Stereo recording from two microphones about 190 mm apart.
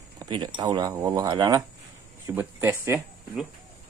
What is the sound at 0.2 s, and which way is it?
Speech, 25° right (ahead or behind).